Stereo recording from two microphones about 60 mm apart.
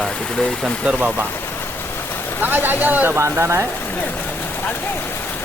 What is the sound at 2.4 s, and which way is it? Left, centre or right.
Speech, right.